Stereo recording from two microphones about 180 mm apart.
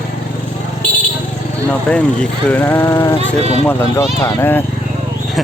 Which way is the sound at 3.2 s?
35° right (ahead or behind).